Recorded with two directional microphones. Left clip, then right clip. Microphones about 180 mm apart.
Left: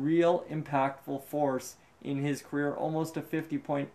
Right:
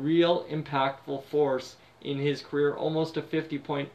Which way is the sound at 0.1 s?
50° left (ahead or behind).